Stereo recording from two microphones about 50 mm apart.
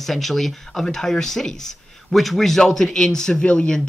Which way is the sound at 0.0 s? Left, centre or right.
Centre.